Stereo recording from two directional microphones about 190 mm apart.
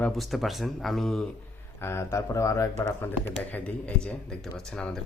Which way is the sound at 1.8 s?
15° left (ahead or behind).